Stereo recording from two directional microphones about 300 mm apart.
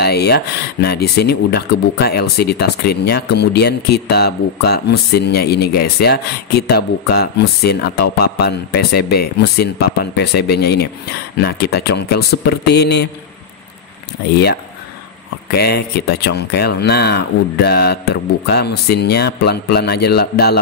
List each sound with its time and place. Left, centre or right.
0.0 s speech: left
14.3 s speech: left